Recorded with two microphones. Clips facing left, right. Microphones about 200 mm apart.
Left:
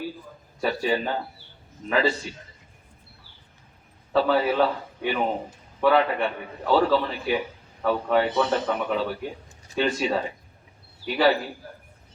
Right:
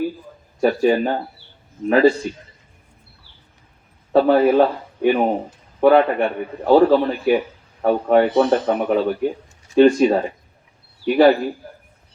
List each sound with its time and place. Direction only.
0.6 s a man's voice: 50° right (ahead or behind)
4.1 s a man's voice: 50° right (ahead or behind)